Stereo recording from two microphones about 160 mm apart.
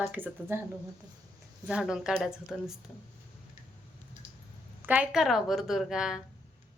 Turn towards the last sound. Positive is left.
turn(degrees=-5)  # may be behind; listen again after turning